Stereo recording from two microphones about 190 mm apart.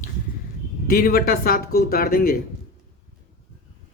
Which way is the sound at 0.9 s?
50° left (ahead or behind).